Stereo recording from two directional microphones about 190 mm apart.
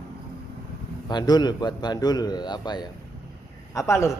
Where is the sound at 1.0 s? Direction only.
20° left (ahead or behind).